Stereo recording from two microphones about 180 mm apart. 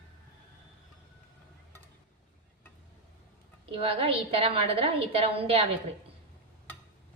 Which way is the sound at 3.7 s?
30° right (ahead or behind).